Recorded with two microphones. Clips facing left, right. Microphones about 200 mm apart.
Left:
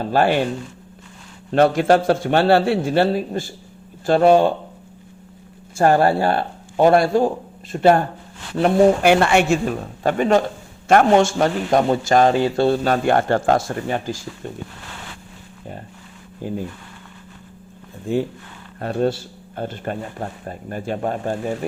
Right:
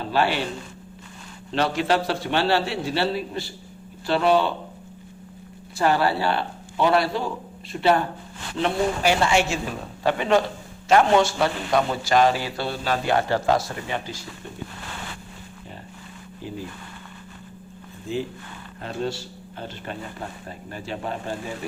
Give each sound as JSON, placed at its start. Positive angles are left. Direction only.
{"t": 0.0, "sound": "speech", "side_deg": 50}
{"t": 1.5, "sound": "speech", "side_deg": 50}
{"t": 5.7, "sound": "speech", "side_deg": 50}
{"t": 10.0, "sound": "speech", "side_deg": 45}
{"t": 12.3, "sound": "speech", "side_deg": 25}
{"t": 12.6, "sound": "speech", "side_deg": 50}
{"t": 16.4, "sound": "speech", "side_deg": 50}
{"t": 18.8, "sound": "speech", "side_deg": 55}